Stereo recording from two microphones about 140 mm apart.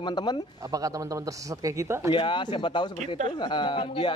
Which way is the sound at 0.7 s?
25° right (ahead or behind).